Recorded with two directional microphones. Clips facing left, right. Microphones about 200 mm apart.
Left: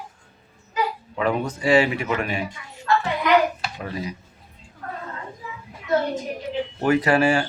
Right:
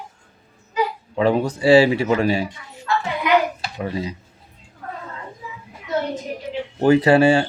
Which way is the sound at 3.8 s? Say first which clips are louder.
Right 6 dB; 30° right (ahead or behind).